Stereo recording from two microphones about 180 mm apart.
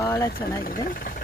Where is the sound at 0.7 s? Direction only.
50° left (ahead or behind).